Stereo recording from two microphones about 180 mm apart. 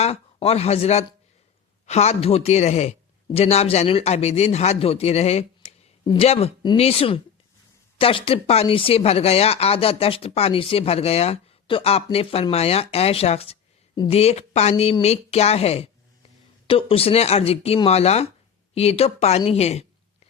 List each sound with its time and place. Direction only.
0.0 s speech: 35° left (ahead or behind)